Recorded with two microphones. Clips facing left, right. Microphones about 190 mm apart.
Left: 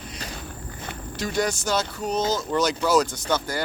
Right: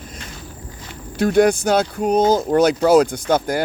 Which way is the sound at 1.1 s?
55° right (ahead or behind).